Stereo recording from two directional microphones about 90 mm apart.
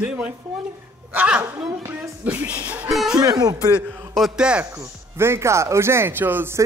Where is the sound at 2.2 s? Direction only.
15° right (ahead or behind).